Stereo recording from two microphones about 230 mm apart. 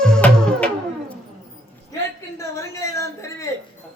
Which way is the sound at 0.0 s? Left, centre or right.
Centre.